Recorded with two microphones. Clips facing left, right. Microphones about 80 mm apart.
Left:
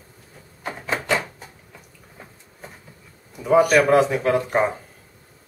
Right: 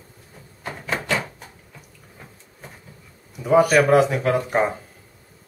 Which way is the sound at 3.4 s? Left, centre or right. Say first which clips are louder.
Even; centre.